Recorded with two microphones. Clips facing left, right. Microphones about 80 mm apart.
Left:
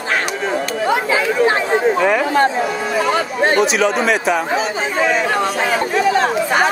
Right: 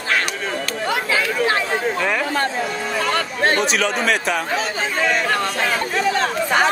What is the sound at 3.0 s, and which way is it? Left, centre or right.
Speech, centre.